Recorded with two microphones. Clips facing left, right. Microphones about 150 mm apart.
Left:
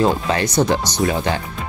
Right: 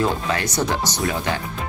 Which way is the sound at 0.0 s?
30° left (ahead or behind).